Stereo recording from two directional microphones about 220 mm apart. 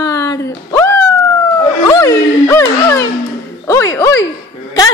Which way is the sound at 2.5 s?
10° left (ahead or behind).